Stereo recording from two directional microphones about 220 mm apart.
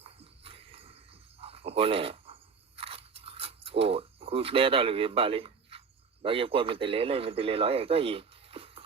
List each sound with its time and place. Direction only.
0.0 s horse: 25° right (ahead or behind)
1.4 s crunch: 25° right (ahead or behind)
6.2 s speech: 25° right (ahead or behind)